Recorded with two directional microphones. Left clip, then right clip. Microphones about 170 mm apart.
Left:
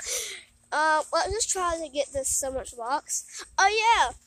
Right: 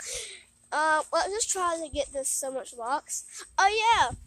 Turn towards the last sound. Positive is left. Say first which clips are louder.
# left 1 dB
turn(degrees=-5)  # may be behind; listen again after turning